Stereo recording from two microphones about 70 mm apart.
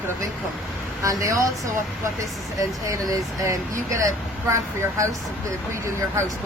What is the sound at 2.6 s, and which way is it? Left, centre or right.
Speech, right.